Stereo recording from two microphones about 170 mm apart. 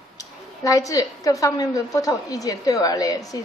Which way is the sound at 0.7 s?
20° left (ahead or behind).